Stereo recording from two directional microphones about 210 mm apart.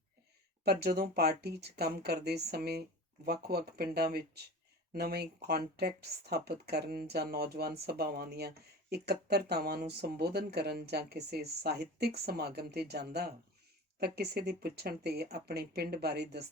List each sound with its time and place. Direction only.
0.6 s speech: 50° right (ahead or behind)